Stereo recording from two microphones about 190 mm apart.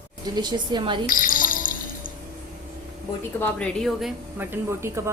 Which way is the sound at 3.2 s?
10° left (ahead or behind).